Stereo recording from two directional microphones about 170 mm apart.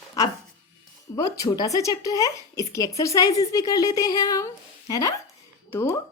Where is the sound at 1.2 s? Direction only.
20° left (ahead or behind).